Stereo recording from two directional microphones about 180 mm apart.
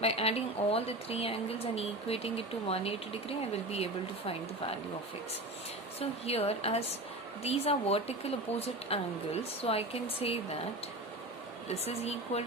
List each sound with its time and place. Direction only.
0.0 s a woman's voice: 35° left (ahead or behind)
6.0 s a woman's voice: 35° left (ahead or behind)
11.7 s a woman's voice: 35° left (ahead or behind)